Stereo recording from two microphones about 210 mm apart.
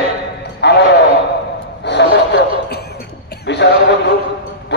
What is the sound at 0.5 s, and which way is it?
Music, 55° left (ahead or behind).